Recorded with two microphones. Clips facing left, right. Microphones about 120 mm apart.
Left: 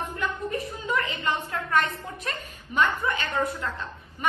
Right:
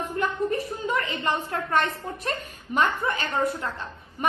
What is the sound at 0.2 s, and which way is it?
A woman's voice, 40° right (ahead or behind).